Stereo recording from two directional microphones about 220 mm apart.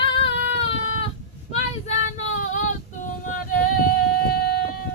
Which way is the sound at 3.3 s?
40° left (ahead or behind).